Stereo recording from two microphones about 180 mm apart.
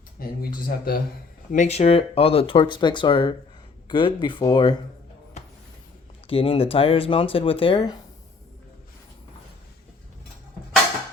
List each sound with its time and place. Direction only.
0.2 s speech: 55° left (ahead or behind)
1.5 s speech: 40° left (ahead or behind)
6.2 s speech: 30° left (ahead or behind)